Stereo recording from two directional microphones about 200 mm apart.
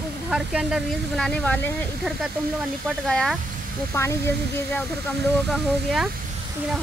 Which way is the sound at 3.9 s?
15° left (ahead or behind).